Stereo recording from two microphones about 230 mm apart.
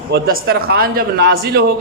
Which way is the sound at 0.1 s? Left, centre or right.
Right.